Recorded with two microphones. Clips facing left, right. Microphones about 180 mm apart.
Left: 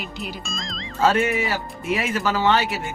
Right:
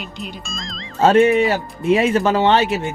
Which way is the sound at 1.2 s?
20° right (ahead or behind).